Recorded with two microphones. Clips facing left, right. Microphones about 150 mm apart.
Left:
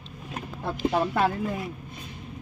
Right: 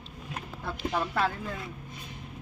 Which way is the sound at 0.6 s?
30° left (ahead or behind).